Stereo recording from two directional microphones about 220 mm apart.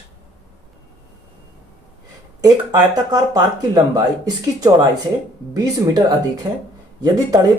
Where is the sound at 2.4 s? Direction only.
15° right (ahead or behind).